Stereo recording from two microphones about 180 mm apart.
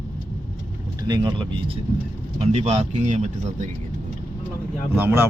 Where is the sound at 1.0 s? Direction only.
25° right (ahead or behind).